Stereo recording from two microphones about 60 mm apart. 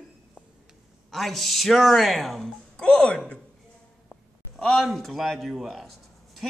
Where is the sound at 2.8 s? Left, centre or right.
Centre.